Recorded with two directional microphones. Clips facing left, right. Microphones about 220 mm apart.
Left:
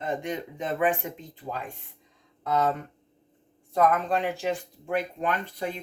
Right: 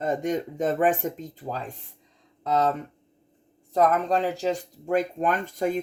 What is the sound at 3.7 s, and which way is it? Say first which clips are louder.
Speech: right 2 dB; 40° right (ahead or behind).